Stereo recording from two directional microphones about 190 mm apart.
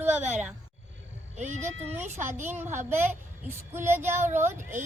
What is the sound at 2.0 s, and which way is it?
Speech, 40° right (ahead or behind).